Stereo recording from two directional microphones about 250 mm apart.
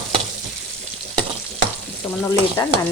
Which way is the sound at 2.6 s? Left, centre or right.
Centre.